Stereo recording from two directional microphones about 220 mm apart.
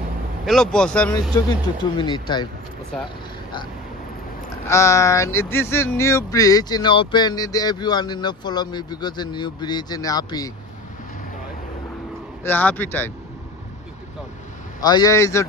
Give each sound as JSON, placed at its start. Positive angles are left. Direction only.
{"t": 0.5, "sound": "speech", "side_deg": 5}
{"t": 1.3, "sound": "speech", "side_deg": 20}
{"t": 4.6, "sound": "speech", "side_deg": 15}
{"t": 12.4, "sound": "speech", "side_deg": 10}
{"t": 14.8, "sound": "speech", "side_deg": 20}